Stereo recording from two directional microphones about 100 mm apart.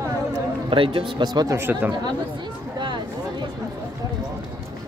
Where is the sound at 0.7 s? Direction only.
55° right (ahead or behind).